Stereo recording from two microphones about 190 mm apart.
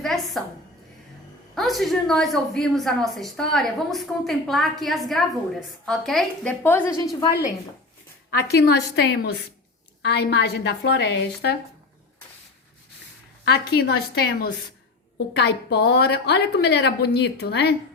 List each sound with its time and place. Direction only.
0.0 s a woman's voice: centre (ahead or behind)
1.5 s a woman's voice: centre (ahead or behind)
8.5 s a woman's voice: 60° left (ahead or behind)
13.4 s a woman's voice: 60° left (ahead or behind)